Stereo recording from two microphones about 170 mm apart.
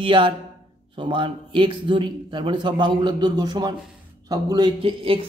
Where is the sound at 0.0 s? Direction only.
30° right (ahead or behind).